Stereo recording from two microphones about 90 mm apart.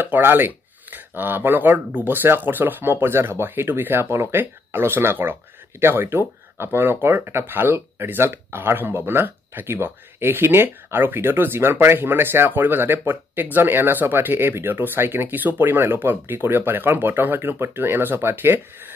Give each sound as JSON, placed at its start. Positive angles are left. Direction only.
{"t": 0.0, "sound": "speech", "side_deg": -25}